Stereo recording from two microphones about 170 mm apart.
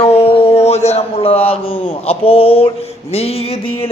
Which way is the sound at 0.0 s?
35° left (ahead or behind).